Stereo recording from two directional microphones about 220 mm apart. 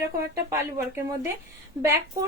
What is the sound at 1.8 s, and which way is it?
Speech, 10° right (ahead or behind).